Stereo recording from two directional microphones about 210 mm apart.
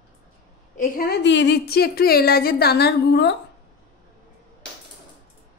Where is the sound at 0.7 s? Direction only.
40° left (ahead or behind).